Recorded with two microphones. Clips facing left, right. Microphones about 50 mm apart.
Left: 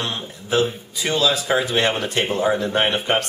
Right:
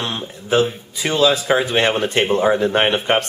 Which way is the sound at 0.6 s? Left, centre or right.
Centre.